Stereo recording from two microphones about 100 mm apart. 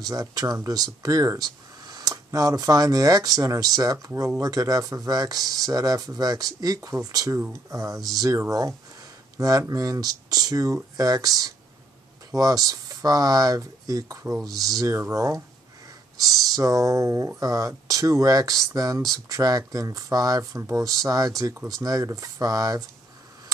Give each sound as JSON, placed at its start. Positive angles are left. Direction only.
{"t": 0.0, "sound": "speech", "side_deg": -35}